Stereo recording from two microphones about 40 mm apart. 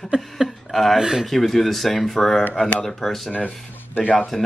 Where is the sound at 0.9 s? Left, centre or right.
Centre.